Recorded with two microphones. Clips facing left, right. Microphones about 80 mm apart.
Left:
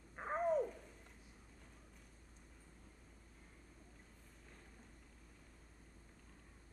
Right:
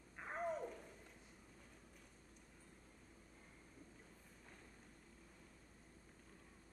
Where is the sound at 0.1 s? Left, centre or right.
Left.